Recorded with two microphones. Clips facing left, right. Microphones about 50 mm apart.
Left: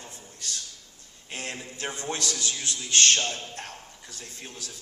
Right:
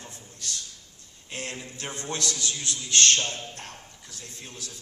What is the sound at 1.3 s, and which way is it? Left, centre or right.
A man's voice, left.